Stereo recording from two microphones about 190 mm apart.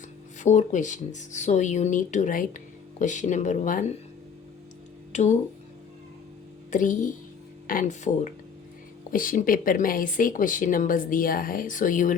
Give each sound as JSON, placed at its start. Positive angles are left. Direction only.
{"t": 0.3, "sound": "speech", "side_deg": 40}
{"t": 5.1, "sound": "speech", "side_deg": 35}
{"t": 6.7, "sound": "speech", "side_deg": 40}